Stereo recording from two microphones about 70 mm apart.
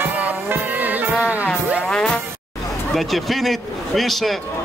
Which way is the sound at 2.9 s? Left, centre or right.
Centre.